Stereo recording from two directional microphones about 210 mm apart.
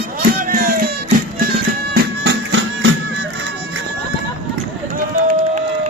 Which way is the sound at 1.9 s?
55° right (ahead or behind).